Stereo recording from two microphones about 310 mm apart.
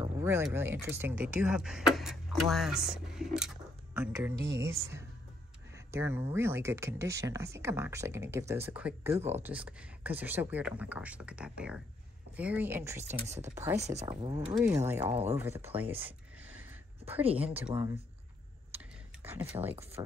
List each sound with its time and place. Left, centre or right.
0.0 s speech: centre
13.7 s speech: right; by 16.0 s centre
16.1 s a sound: centre
17.4 s speech: centre
17.7 s speech: centre
19.2 s speech: centre